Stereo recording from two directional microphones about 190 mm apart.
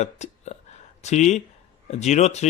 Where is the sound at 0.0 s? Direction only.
35° left (ahead or behind).